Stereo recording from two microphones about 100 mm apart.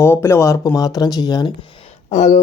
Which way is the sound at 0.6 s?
40° left (ahead or behind).